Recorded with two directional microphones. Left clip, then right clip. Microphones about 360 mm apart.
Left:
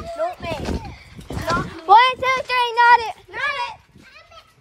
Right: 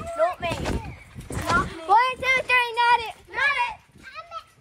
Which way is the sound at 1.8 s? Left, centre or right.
Left.